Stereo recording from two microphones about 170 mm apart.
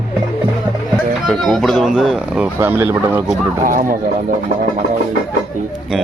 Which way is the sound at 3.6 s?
55° right (ahead or behind).